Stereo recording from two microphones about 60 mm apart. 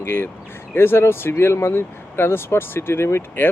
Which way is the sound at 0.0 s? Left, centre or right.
Left.